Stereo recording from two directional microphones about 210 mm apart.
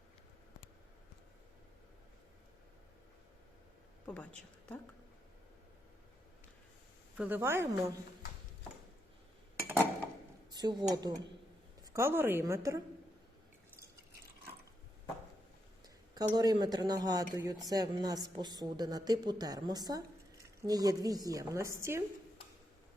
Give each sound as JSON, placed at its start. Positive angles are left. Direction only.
{"t": 4.0, "sound": "a woman's voice", "side_deg": 5}
{"t": 7.2, "sound": "a woman's voice", "side_deg": -10}
{"t": 10.5, "sound": "a woman's voice", "side_deg": -20}
{"t": 16.1, "sound": "a woman's voice", "side_deg": -20}